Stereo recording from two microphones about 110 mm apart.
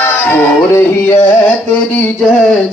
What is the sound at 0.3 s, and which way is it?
Music, 20° left (ahead or behind).